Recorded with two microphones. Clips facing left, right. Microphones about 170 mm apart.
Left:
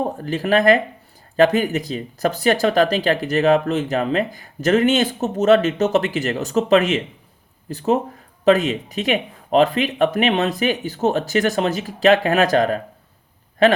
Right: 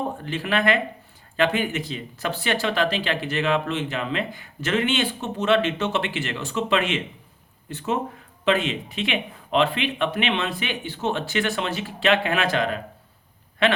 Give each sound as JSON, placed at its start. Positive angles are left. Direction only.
{"t": 0.2, "sound": "speech", "side_deg": 40}